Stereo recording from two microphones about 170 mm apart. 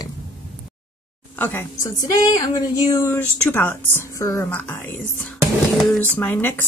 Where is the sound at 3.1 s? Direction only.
10° left (ahead or behind).